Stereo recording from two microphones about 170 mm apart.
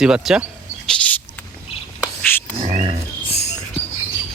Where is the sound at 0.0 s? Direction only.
5° right (ahead or behind).